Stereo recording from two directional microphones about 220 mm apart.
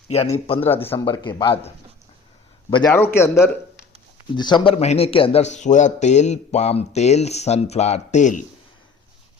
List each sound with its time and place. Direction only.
0.4 s speech: 25° left (ahead or behind)
0.7 s a man's voice: 10° left (ahead or behind)
1.0 s a man's voice: 20° left (ahead or behind)
2.9 s a man's voice: 10° left (ahead or behind)
4.4 s a man's voice: 20° left (ahead or behind)